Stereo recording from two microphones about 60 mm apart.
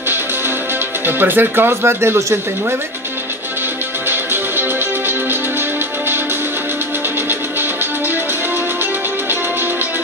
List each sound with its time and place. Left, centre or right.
1.0 s speech: right
4.1 s music: right